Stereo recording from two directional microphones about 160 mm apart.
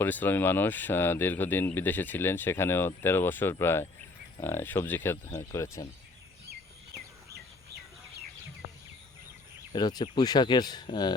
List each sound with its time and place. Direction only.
0.0 s speech: 10° left (ahead or behind)
9.7 s speech: 25° left (ahead or behind)